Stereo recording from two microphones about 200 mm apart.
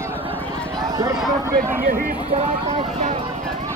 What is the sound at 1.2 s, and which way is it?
Speech, centre (ahead or behind).